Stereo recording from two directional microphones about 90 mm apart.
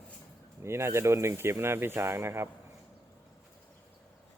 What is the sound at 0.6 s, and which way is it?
Speech, 30° right (ahead or behind).